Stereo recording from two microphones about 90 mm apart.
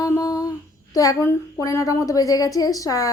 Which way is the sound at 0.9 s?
40° left (ahead or behind).